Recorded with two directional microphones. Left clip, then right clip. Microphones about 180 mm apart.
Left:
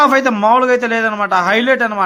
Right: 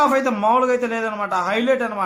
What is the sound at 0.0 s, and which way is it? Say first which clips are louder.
A man's voice: left 6 dB; 30° left (ahead or behind).